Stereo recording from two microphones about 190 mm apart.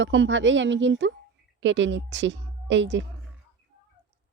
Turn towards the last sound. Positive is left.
turn(degrees=-70)  # may be behind; listen again after turning